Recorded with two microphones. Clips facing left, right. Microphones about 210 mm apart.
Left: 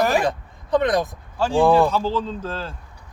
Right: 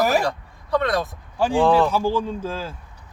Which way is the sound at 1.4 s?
15° right (ahead or behind).